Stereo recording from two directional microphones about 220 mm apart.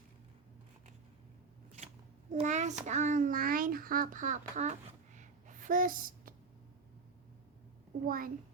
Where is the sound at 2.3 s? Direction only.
35° right (ahead or behind).